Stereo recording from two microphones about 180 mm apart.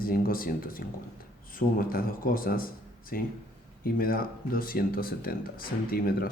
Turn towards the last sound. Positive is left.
turn(degrees=55)  # may be behind; listen again after turning